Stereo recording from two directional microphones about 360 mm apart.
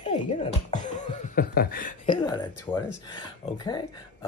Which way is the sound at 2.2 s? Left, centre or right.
Centre.